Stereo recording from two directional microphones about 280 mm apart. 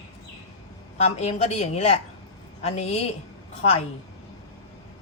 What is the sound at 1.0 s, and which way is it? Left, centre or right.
A woman's voice, left.